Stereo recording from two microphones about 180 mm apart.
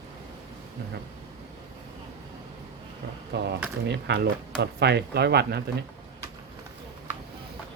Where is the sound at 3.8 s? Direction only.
70° right (ahead or behind).